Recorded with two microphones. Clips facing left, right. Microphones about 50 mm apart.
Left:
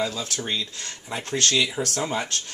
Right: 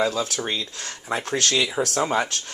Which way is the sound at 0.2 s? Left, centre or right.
Right.